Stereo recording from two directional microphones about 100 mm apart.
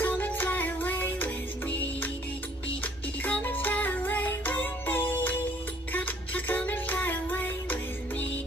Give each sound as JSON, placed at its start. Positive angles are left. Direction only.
{"t": 0.0, "sound": "music", "side_deg": 15}